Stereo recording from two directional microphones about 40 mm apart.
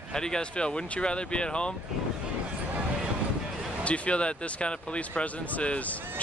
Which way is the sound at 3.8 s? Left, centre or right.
Left.